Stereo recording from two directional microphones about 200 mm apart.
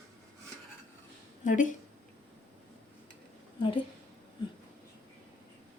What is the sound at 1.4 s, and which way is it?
Speech, 40° left (ahead or behind).